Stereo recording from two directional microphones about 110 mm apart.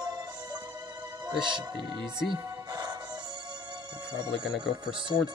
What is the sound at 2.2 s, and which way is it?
Music, 40° right (ahead or behind).